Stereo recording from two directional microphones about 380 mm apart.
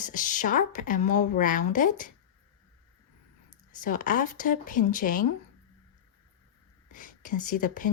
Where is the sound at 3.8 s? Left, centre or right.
Left.